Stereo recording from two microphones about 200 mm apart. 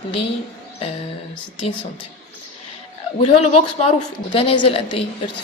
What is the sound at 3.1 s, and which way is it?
A woman's voice, 35° left (ahead or behind).